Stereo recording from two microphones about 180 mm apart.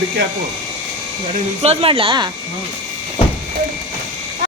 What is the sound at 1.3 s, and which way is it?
Speech, 30° right (ahead or behind).